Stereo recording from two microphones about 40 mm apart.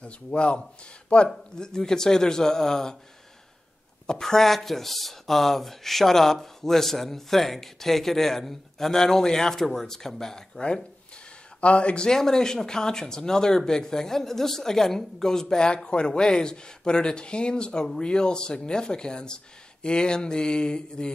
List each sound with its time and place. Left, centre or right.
0.0 s speech: left
4.1 s speech: centre
11.6 s a man's voice: left
12.1 s speech: centre